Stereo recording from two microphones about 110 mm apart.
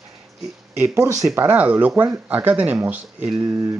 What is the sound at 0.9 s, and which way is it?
Speech, 30° right (ahead or behind).